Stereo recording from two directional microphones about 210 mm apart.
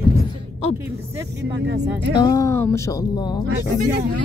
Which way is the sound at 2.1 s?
15° left (ahead or behind).